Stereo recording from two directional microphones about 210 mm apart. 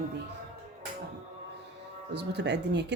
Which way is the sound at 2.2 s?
55° right (ahead or behind).